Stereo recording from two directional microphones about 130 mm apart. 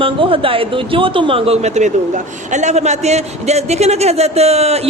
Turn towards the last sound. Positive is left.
turn(degrees=-55)  # may be behind; listen again after turning